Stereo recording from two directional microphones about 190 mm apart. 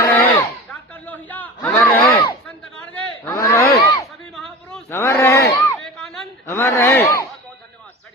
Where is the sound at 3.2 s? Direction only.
15° left (ahead or behind).